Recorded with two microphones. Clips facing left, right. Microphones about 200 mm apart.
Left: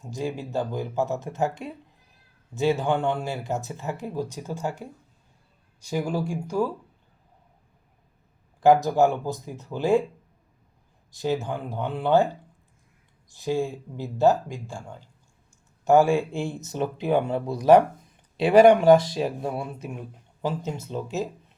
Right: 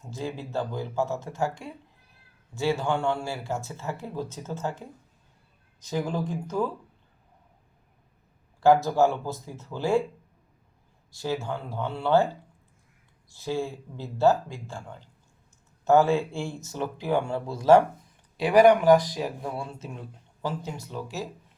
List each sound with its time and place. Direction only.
0.0 s speech: 15° left (ahead or behind)
8.6 s speech: 15° left (ahead or behind)
11.1 s speech: 20° left (ahead or behind)